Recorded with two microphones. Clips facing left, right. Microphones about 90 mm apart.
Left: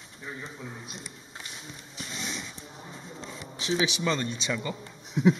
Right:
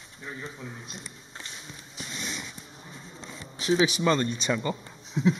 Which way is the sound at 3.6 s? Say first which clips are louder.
Right 4 dB; 40° right (ahead or behind).